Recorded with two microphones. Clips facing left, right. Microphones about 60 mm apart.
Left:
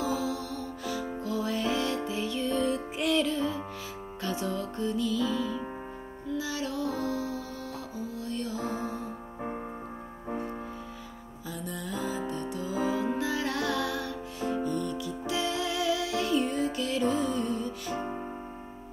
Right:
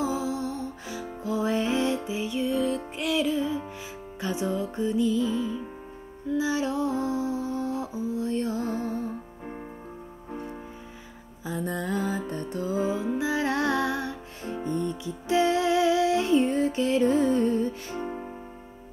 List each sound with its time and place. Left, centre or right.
0.0 s music: right
2.6 s music: centre; by 9.1 s right
11.4 s music: right
11.7 s music: right